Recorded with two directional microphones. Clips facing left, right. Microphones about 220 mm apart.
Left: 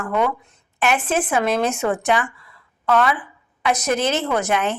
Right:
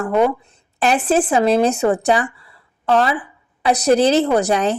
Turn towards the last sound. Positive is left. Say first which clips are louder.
# right 5 dB
turn(degrees=-35)  # may be behind; listen again after turning